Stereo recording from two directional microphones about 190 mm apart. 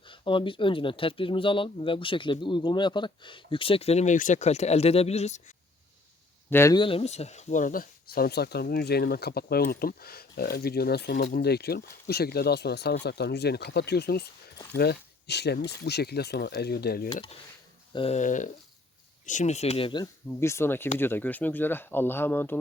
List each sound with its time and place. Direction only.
0.0 s speech: 25° left (ahead or behind)
6.5 s speech: 15° left (ahead or behind)
6.8 s speech: 30° left (ahead or behind); by 17.1 s 55° left (ahead or behind)
17.9 s speech: 30° left (ahead or behind); by 22.5 s 10° left (ahead or behind)